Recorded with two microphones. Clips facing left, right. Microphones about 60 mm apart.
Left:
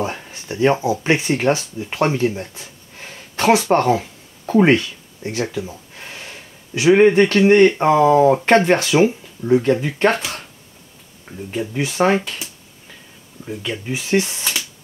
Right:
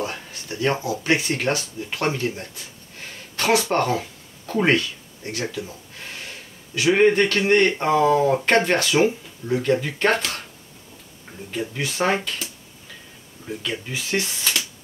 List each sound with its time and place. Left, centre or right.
0.0 s a sound: left
1.0 s speech: left
2.3 s a sound: centre
6.7 s speech: left
9.7 s speech: centre
11.7 s speech: centre
13.4 s speech: left